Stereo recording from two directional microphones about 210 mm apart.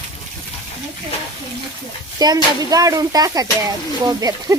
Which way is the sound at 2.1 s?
20° right (ahead or behind).